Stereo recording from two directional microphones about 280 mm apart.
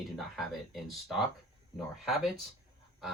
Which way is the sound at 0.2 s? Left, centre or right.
Centre.